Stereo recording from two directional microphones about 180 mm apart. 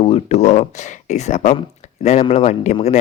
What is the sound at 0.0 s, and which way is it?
Speech, 35° left (ahead or behind).